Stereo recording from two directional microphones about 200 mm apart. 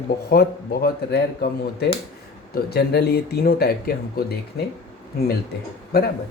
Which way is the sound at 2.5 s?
50° left (ahead or behind).